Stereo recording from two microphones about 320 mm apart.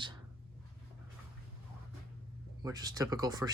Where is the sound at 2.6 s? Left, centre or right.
Centre.